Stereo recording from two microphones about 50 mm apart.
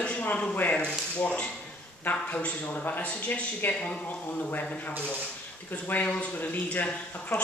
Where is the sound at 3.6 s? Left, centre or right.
Left.